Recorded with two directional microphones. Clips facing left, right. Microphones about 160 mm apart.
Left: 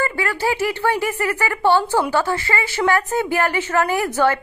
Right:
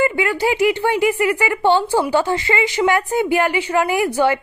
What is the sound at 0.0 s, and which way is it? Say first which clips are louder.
A woman's voice: right 4 dB; 20° right (ahead or behind).